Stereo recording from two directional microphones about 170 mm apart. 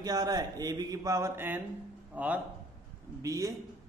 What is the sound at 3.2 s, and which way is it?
Speech, 20° right (ahead or behind).